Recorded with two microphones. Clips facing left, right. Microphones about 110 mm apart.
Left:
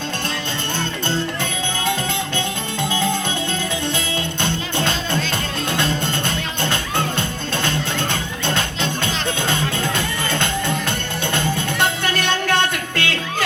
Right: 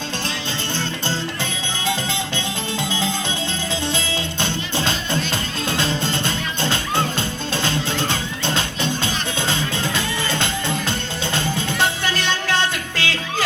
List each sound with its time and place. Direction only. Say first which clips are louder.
2.9 s music: left 3 dB; 55° left (ahead or behind)